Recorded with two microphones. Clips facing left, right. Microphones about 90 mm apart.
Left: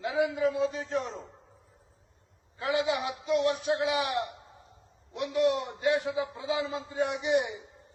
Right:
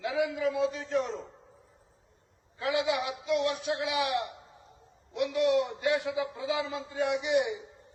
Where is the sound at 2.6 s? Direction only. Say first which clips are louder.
Even; 35° left (ahead or behind).